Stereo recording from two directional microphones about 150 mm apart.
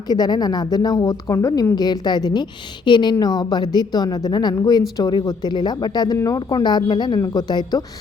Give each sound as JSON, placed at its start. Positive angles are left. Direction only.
{"t": 0.1, "sound": "a woman's voice", "side_deg": 25}